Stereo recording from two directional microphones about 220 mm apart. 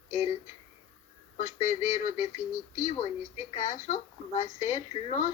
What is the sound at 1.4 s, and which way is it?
Speech, 35° left (ahead or behind).